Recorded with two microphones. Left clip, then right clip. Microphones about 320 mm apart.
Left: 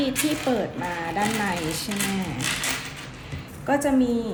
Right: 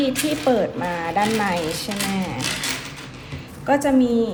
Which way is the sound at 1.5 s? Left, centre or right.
Centre.